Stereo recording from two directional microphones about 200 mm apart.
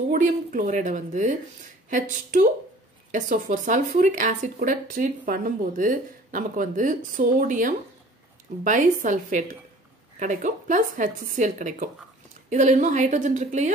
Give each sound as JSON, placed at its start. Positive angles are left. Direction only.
{"t": 0.1, "sound": "speech", "side_deg": -40}
{"t": 3.1, "sound": "speech", "side_deg": -40}